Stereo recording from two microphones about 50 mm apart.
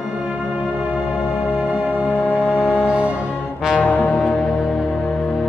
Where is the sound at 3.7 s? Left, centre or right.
Left.